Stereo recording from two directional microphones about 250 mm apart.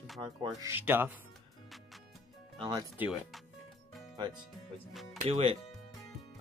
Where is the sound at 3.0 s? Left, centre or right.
Centre.